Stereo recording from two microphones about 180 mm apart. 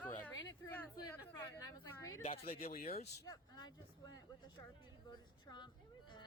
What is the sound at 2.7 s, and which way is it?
Speech, 55° left (ahead or behind).